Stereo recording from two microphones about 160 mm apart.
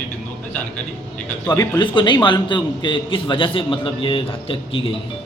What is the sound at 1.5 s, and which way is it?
A man's voice, 25° left (ahead or behind).